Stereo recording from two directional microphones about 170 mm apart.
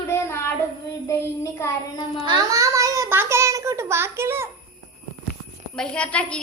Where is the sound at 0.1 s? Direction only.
15° left (ahead or behind).